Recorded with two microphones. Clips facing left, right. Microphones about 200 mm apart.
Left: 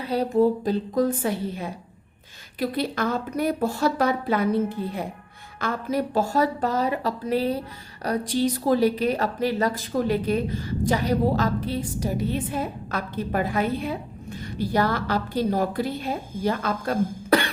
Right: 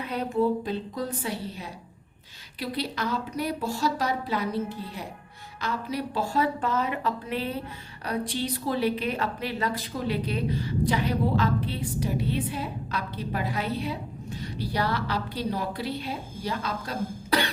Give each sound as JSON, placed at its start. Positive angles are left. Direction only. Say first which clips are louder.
{"t": 0.0, "sound": "a woman's voice", "louder": "left 5 dB", "side_deg": 35}